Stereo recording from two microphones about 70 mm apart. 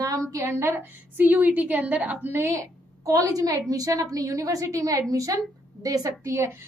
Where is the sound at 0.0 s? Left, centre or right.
Right; by 2.1 s centre.